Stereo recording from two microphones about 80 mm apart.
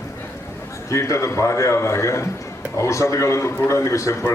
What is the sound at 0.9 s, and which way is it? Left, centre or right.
A man's voice, left.